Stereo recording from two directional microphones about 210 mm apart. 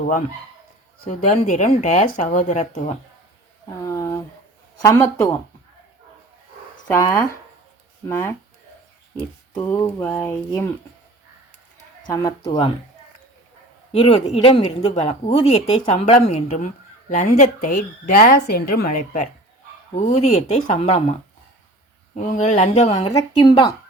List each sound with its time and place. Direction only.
1.1 s speech: 40° left (ahead or behind)
3.8 s a sound: 15° left (ahead or behind)
4.8 s speech: 15° left (ahead or behind)
6.8 s speech: 15° left (ahead or behind)
12.1 s speech: 20° left (ahead or behind)
14.0 s speech: 30° left (ahead or behind)
23.3 s speech: 25° left (ahead or behind)